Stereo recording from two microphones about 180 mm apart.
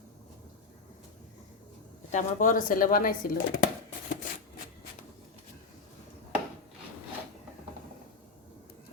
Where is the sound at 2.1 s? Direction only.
45° left (ahead or behind).